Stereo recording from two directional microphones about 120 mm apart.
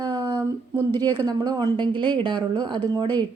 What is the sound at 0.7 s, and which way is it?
A woman's voice, 35° right (ahead or behind).